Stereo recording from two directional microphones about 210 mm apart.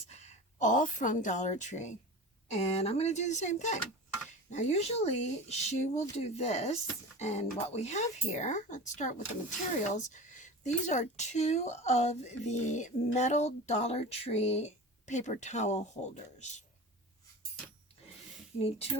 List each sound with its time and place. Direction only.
0.1 s a woman's voice: 35° left (ahead or behind)